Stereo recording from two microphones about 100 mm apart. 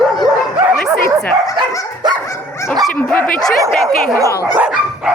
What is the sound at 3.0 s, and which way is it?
Speech, 20° left (ahead or behind).